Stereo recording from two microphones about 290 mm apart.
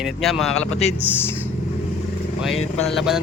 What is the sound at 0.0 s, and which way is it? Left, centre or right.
Speech, centre.